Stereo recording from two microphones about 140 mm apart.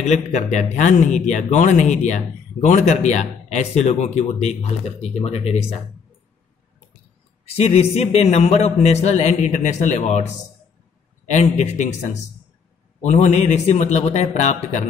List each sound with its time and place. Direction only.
0.0 s a man's voice: 55° left (ahead or behind)
7.4 s a man's voice: 45° left (ahead or behind)
11.2 s a man's voice: 55° left (ahead or behind)